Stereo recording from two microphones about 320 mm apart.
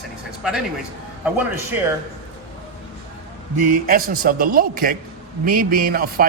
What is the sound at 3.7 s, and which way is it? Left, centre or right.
A man's voice, right.